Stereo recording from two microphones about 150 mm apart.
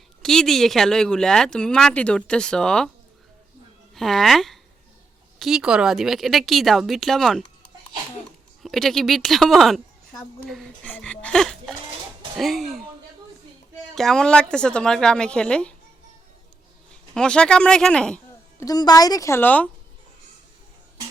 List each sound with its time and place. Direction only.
0.2 s a woman's voice: 5° left (ahead or behind)
3.9 s a woman's voice: centre (ahead or behind)
13.9 s a woman's voice: 5° left (ahead or behind)
17.2 s a woman's voice: 5° left (ahead or behind)
18.6 s speech: 25° left (ahead or behind)